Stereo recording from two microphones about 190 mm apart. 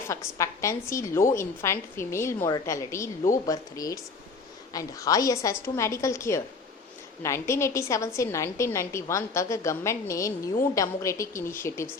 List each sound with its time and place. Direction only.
0.1 s a woman's voice: 15° left (ahead or behind)